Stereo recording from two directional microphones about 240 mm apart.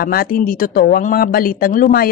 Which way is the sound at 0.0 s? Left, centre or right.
Left.